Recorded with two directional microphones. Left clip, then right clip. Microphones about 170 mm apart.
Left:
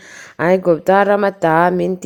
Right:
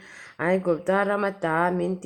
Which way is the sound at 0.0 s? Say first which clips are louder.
Left 9 dB; 45° left (ahead or behind).